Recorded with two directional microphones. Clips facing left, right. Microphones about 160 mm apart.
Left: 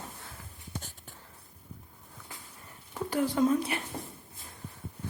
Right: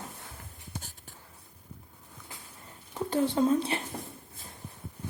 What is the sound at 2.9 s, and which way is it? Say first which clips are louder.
Speech: right 1 dB; 25° right (ahead or behind).